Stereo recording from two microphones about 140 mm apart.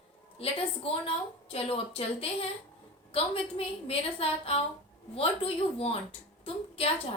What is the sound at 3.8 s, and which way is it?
A woman's voice, 45° left (ahead or behind).